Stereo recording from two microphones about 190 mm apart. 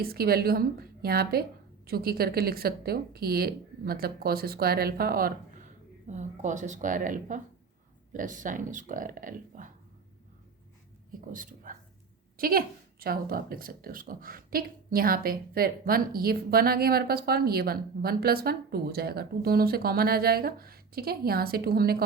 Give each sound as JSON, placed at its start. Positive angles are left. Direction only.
{"t": 0.0, "sound": "speech", "side_deg": -50}
{"t": 6.1, "sound": "speech", "side_deg": -40}
{"t": 11.3, "sound": "speech", "side_deg": -45}